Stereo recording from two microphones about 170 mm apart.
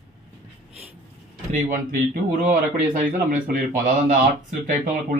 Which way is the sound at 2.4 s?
50° right (ahead or behind).